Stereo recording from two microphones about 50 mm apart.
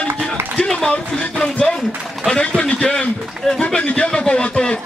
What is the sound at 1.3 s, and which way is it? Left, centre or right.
Speech, centre.